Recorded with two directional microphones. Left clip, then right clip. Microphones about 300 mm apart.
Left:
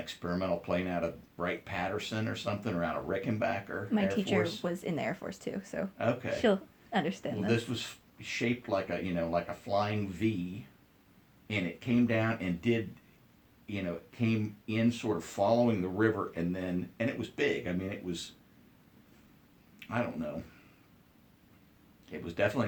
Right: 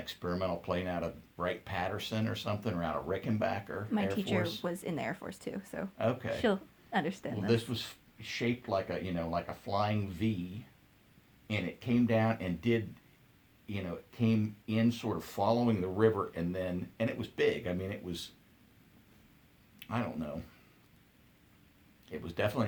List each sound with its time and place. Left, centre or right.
0.0 s speech: right
3.9 s speech: centre
6.0 s speech: right
6.3 s speech: centre
7.4 s speech: right
11.4 s speech: right
19.8 s a sound: right
22.0 s speech: right